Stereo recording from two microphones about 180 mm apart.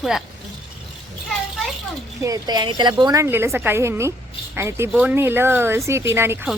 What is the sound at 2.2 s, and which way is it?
A woman's voice, 20° right (ahead or behind).